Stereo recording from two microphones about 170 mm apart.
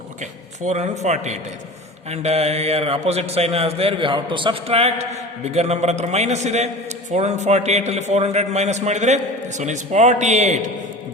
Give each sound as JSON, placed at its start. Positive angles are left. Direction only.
{"t": 0.2, "sound": "a man's voice", "side_deg": -45}